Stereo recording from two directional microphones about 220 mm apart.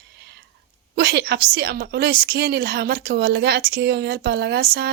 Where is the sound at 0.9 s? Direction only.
50° right (ahead or behind).